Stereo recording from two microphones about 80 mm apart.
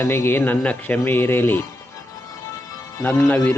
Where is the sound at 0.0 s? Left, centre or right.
Left.